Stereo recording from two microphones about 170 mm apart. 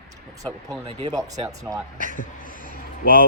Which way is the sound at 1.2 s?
20° right (ahead or behind).